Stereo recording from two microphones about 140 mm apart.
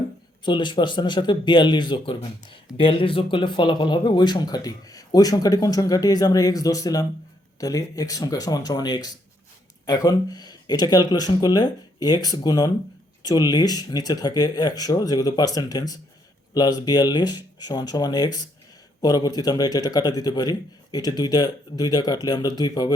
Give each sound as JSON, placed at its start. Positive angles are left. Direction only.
{"t": 0.4, "sound": "speech", "side_deg": 30}